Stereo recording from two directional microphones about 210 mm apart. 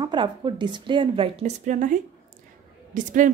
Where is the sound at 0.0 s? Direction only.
20° right (ahead or behind).